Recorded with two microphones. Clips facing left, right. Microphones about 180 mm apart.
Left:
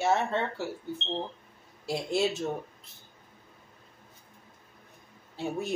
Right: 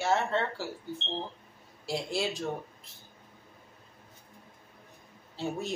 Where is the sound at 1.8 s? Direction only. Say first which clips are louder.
Left 4 dB; 25° left (ahead or behind).